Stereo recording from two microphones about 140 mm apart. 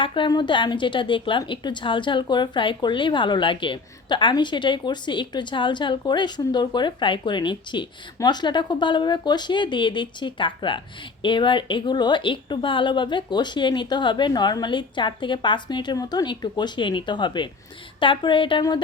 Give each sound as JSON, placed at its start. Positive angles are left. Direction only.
{"t": 0.0, "sound": "a woman's voice", "side_deg": 35}